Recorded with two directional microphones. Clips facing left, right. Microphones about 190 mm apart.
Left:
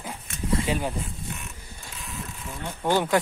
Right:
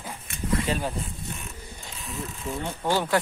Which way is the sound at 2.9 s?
15° left (ahead or behind).